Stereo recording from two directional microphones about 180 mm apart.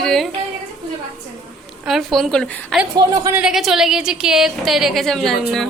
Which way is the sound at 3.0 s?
15° right (ahead or behind).